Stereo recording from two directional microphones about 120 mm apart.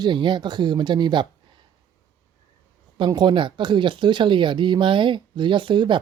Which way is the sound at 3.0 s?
40° right (ahead or behind).